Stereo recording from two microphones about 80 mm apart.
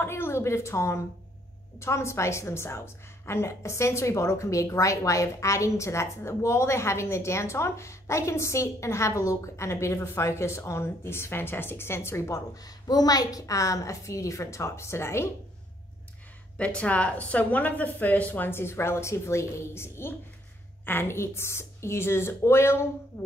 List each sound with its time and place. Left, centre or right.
0.0 s a sound: left
1.8 s a woman's voice: left
12.6 s a woman's voice: left
16.5 s a woman's voice: centre; by 22.8 s left